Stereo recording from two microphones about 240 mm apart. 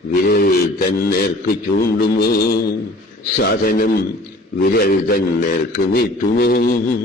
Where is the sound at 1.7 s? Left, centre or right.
Left.